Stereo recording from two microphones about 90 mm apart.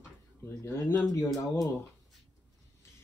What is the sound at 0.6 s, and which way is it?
Speech, 35° left (ahead or behind).